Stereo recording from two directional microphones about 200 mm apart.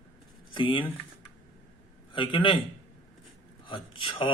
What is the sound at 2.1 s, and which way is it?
Speech, 25° left (ahead or behind).